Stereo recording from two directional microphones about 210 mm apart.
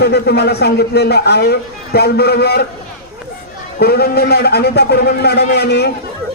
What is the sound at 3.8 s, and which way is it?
A man's voice, 50° left (ahead or behind).